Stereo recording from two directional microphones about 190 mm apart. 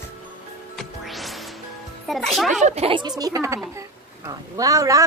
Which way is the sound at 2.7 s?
30° right (ahead or behind).